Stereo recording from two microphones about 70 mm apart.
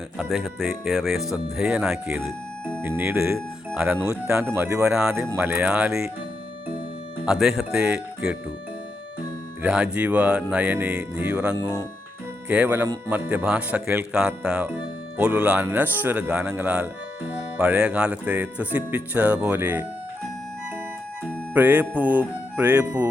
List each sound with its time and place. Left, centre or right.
0.3 s speech: centre
2.8 s speech: right
4.4 s speech: right
4.9 s speech: centre
5.1 s speech: right
5.4 s speech: right
7.3 s speech: centre
9.6 s speech: centre
16.3 s speech: centre
19.5 s speech: right
21.5 s speech: right